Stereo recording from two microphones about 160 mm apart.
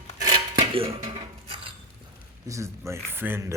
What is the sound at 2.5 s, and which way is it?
A man's voice, 20° right (ahead or behind).